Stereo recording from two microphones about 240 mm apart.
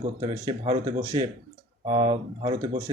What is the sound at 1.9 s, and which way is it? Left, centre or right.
Speech, centre.